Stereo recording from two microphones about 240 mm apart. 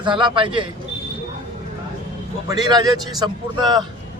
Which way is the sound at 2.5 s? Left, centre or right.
Centre.